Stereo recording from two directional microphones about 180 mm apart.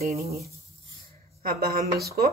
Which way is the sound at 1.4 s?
60° right (ahead or behind).